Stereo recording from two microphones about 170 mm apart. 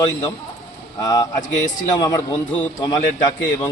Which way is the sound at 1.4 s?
45° left (ahead or behind).